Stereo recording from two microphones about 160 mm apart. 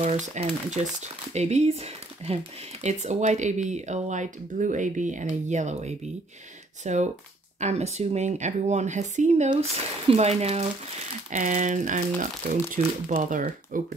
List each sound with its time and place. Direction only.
0.0 s speech: 45° right (ahead or behind)